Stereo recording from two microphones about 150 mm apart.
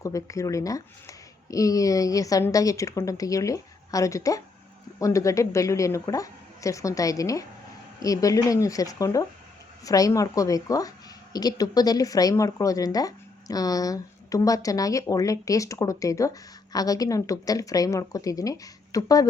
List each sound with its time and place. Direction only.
0.0 s speech: 20° left (ahead or behind)